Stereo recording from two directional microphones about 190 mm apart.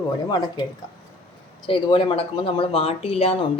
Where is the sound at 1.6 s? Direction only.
25° left (ahead or behind).